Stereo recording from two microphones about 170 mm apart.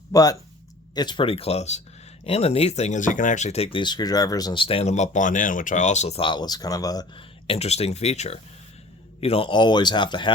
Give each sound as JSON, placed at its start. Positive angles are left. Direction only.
{"t": 0.1, "sound": "speech", "side_deg": 20}